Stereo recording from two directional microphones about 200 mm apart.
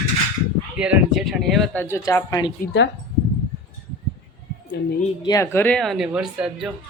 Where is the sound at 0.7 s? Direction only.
5° right (ahead or behind); by 2.5 s 15° left (ahead or behind).